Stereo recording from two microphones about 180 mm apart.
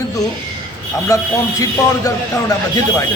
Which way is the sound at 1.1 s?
20° left (ahead or behind).